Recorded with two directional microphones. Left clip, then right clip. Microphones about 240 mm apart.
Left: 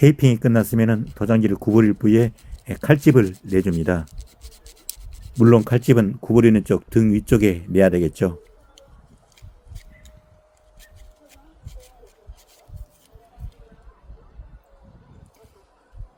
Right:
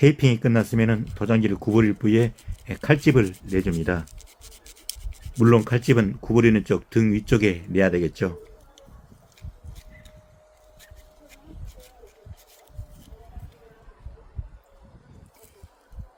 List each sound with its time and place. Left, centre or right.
0.0 s speech: left
5.4 s speech: centre